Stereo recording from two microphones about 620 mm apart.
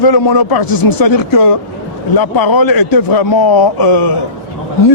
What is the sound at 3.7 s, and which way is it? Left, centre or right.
Speech, left.